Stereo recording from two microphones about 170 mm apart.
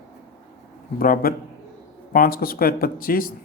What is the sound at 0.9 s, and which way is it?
Speech, 55° left (ahead or behind).